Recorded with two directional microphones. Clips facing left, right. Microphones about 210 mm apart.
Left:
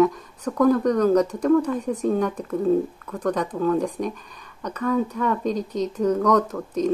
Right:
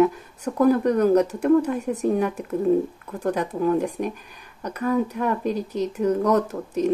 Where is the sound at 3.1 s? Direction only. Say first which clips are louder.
Left 1 dB; 25° right (ahead or behind).